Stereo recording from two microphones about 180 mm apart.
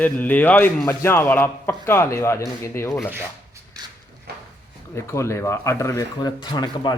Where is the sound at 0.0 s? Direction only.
10° left (ahead or behind).